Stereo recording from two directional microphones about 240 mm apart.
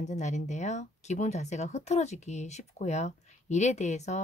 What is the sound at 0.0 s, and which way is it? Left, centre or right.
Speech, left.